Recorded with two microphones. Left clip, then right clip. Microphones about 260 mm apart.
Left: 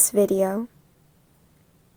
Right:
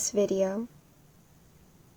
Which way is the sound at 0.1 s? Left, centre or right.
Left.